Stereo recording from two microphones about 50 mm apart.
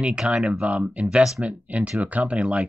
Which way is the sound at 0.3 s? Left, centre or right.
Centre.